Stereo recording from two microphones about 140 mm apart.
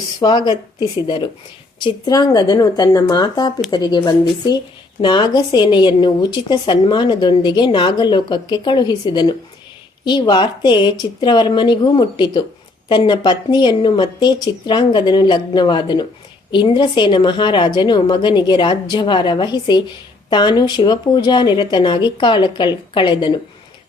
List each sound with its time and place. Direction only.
0.2 s a woman's voice: 30° left (ahead or behind)